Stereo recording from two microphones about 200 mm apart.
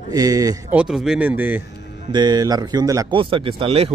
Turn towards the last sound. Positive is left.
turn(degrees=-25)  # may be behind; listen again after turning